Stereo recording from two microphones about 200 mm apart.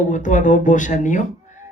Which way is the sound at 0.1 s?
40° left (ahead or behind).